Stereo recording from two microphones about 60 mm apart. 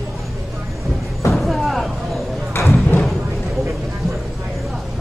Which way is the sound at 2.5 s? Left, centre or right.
Left.